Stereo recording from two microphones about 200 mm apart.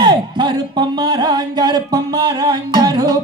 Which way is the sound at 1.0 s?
20° right (ahead or behind).